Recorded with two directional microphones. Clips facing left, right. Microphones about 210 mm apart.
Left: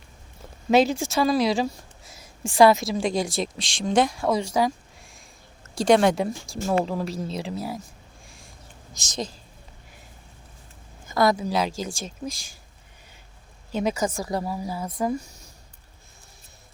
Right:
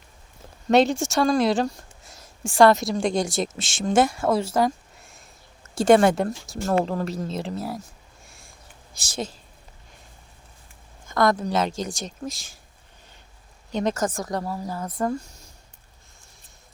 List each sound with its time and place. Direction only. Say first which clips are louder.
0.7 s speech: right 1 dB; centre (ahead or behind)
5.7 s speech: right 2 dB; 5° right (ahead or behind)
9.0 s speech: right 1 dB; 10° right (ahead or behind)
11.1 s speech: even; 5° left (ahead or behind)
13.7 s speech: right 1 dB; 5° left (ahead or behind)